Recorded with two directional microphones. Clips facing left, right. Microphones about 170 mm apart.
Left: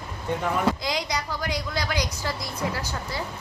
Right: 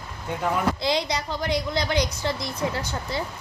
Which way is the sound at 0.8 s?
30° right (ahead or behind).